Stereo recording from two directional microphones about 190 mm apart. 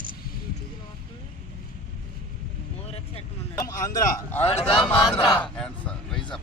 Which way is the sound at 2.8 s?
30° left (ahead or behind).